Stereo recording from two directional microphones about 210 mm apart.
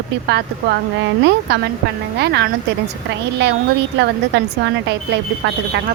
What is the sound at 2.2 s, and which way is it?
Speech, 50° right (ahead or behind).